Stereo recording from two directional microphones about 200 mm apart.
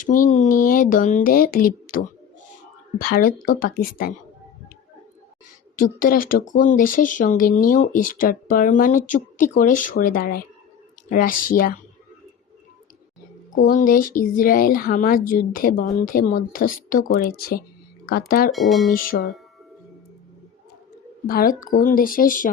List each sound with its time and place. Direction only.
0.0 s speech: 40° left (ahead or behind)
5.7 s speech: 45° left (ahead or behind)
13.6 s speech: 45° left (ahead or behind)
18.5 s speech: centre (ahead or behind)
18.9 s speech: 45° left (ahead or behind)
21.2 s speech: 45° left (ahead or behind)